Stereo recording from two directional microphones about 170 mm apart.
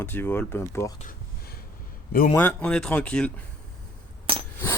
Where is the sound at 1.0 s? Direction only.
55° left (ahead or behind).